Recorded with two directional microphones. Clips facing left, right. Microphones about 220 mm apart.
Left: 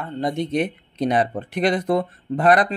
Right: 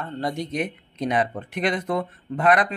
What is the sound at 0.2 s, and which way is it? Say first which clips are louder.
Speech: left 5 dB; 25° left (ahead or behind).